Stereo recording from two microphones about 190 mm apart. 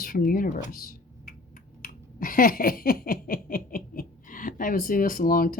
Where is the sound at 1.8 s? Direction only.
45° left (ahead or behind).